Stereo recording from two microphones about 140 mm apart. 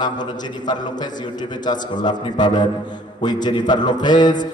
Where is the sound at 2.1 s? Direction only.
30° left (ahead or behind).